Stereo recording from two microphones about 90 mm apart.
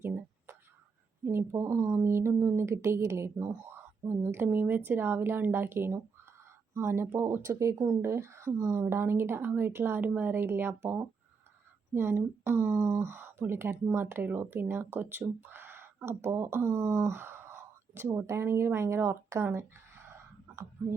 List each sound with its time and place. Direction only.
0.0 s whispering: 20° right (ahead or behind)
1.2 s speech: 25° right (ahead or behind)
3.8 s a sound: 25° right (ahead or behind)
4.4 s speech: 20° right (ahead or behind)